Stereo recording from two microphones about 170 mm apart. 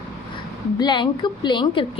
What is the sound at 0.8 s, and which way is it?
A woman's voice, 25° left (ahead or behind).